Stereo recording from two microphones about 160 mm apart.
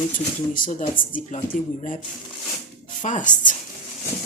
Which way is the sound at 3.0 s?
55° left (ahead or behind).